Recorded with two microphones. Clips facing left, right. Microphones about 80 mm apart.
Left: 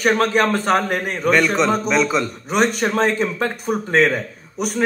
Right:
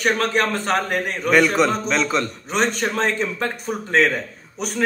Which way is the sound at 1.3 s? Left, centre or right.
Centre.